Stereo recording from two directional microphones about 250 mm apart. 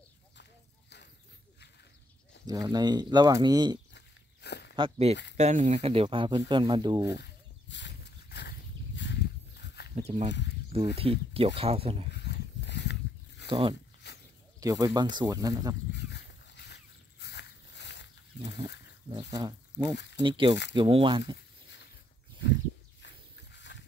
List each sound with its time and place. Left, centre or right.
0.4 s clip-clop: left
2.4 s speech: centre
3.9 s walk: left
4.7 s speech: right
7.7 s a sound: left
9.9 s speech: right
12.1 s dog: left
13.5 s speech: centre
14.0 s a sound: left
14.6 s speech: centre
15.9 s a sound: left
19.0 s speech: centre
23.0 s a sound: left